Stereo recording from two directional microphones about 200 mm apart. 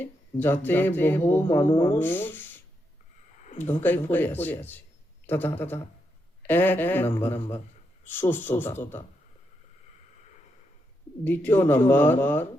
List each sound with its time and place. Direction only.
0.0 s speech: 10° left (ahead or behind)
3.4 s a sound: 40° left (ahead or behind)
3.7 s speech: 10° left (ahead or behind)
11.2 s speech: 10° left (ahead or behind)